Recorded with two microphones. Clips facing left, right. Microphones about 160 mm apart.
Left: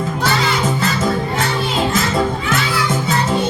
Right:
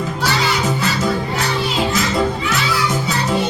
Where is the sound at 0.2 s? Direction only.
50° left (ahead or behind).